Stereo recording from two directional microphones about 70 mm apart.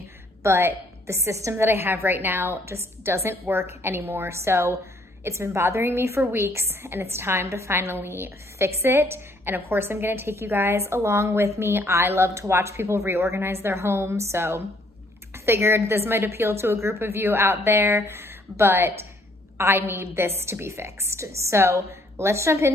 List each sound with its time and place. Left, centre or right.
0.4 s a woman's voice: right
11.0 s a woman's voice: right